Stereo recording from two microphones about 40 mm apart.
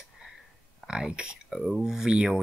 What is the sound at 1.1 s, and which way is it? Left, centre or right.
Speech, right.